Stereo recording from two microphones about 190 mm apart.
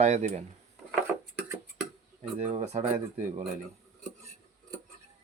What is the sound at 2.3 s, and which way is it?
Speech, 35° right (ahead or behind).